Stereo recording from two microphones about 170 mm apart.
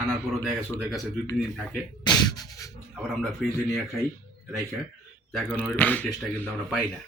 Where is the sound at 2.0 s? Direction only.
20° left (ahead or behind).